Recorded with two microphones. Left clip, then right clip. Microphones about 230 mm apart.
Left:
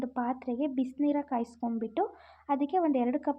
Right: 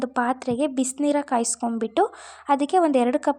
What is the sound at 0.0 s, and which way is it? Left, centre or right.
Speech, right.